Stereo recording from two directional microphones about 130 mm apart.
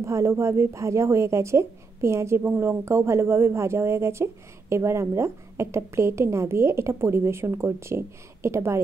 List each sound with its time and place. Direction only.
0.0 s a woman's voice: 25° right (ahead or behind)